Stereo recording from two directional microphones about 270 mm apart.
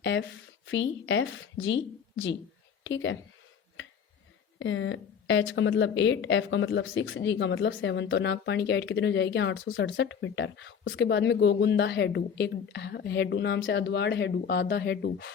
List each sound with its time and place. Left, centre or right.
0.0 s a woman's voice: left
4.6 s a woman's voice: left